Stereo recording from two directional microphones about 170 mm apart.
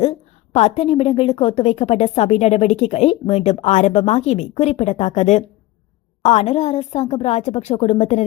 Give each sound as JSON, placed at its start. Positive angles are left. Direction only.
{"t": 0.0, "sound": "a woman's voice", "side_deg": 40}